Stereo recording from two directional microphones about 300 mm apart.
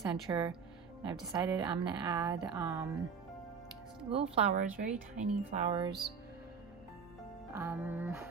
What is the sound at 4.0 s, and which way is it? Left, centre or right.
Music, centre.